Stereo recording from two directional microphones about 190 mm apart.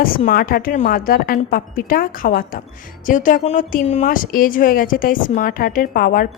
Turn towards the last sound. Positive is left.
turn(degrees=50)  # may be behind; listen again after turning